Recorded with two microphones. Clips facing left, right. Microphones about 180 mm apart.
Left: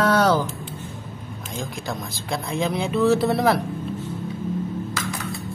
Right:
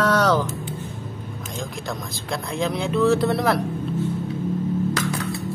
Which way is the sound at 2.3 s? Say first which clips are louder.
Left 1 dB; centre (ahead or behind).